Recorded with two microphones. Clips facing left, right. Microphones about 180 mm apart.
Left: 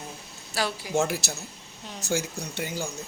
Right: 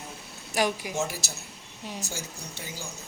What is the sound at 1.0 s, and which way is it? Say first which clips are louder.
Speech: left 5 dB; 60° left (ahead or behind).